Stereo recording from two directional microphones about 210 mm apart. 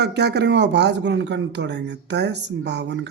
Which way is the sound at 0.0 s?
50° right (ahead or behind).